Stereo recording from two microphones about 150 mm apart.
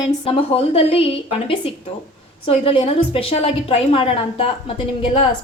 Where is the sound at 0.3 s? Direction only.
40° left (ahead or behind).